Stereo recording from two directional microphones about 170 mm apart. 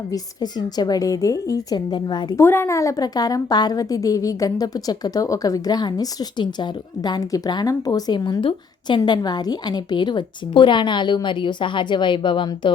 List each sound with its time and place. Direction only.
0.1 s a woman's voice: 25° left (ahead or behind)
2.4 s a woman's voice: 15° left (ahead or behind)